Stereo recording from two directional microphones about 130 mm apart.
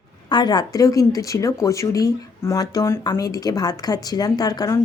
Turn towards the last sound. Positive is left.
turn(degrees=30)  # may be behind; listen again after turning